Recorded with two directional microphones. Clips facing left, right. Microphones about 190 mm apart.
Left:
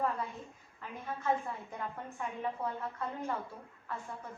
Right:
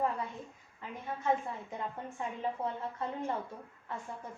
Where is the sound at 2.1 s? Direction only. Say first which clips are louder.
Right 1 dB; 25° right (ahead or behind).